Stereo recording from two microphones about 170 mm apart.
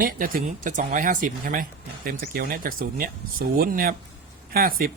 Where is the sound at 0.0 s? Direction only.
55° right (ahead or behind).